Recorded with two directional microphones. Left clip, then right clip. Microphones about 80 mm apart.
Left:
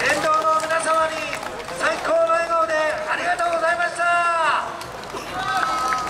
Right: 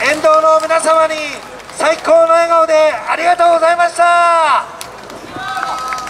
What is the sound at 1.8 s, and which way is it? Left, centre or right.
A man's voice, right.